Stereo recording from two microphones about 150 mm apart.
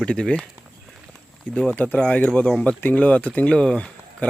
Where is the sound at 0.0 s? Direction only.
5° left (ahead or behind).